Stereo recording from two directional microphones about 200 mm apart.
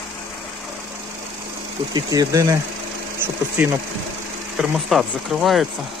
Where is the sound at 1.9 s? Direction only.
20° right (ahead or behind).